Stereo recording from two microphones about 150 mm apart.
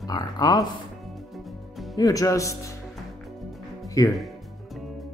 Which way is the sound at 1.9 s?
25° left (ahead or behind).